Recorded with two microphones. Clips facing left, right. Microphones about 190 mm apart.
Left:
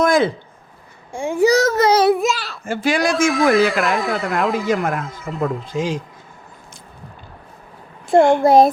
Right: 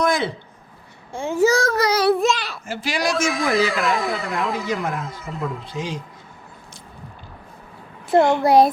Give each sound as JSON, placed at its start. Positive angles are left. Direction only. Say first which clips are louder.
{"t": 0.0, "sound": "a sound", "louder": "left 5 dB", "side_deg": 50}
{"t": 1.1, "sound": "a sound", "louder": "left 3 dB", "side_deg": 15}
{"t": 2.1, "sound": "a sound", "louder": "even", "side_deg": 5}
{"t": 2.6, "sound": "speech", "louder": "left 8 dB", "side_deg": 50}
{"t": 3.2, "sound": "speech", "louder": "left 7 dB", "side_deg": 0}
{"t": 4.1, "sound": "speech", "louder": "left 4 dB", "side_deg": 55}
{"t": 4.4, "sound": "speech", "louder": "left 5 dB", "side_deg": 0}
{"t": 4.7, "sound": "speech", "louder": "left 5 dB", "side_deg": 55}
{"t": 8.1, "sound": "speech", "louder": "left 3 dB", "side_deg": 50}